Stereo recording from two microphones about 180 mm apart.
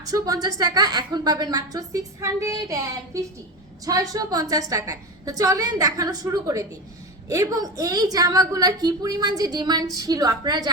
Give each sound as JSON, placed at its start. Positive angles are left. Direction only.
{"t": 0.0, "sound": "a woman's voice", "side_deg": -20}